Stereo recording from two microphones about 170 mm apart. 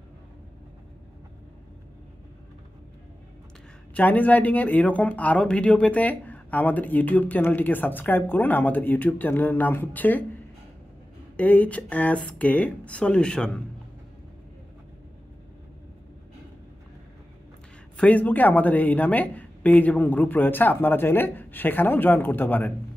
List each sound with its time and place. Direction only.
3.9 s speech: 10° left (ahead or behind)
11.3 s speech: 10° left (ahead or behind)
17.9 s speech: 10° left (ahead or behind)